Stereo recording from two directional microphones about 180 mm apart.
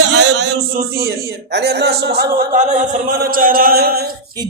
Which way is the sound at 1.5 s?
70° right (ahead or behind).